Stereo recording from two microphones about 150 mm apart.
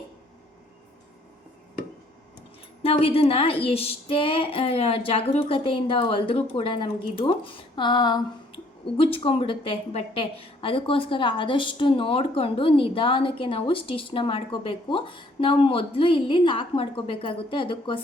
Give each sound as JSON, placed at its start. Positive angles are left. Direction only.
{"t": 2.8, "sound": "a woman's voice", "side_deg": 40}